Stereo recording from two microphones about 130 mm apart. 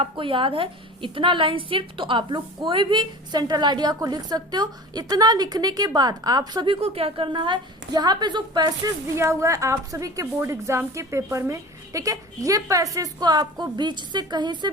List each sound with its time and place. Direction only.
0.0 s a woman's voice: 40° right (ahead or behind)
6.7 s a woman's voice: 50° right (ahead or behind); by 14.7 s 35° right (ahead or behind)